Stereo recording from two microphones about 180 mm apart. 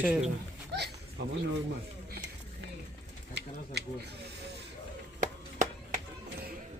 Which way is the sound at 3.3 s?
70° right (ahead or behind).